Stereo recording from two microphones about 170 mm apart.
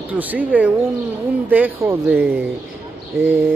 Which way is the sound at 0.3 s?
10° right (ahead or behind).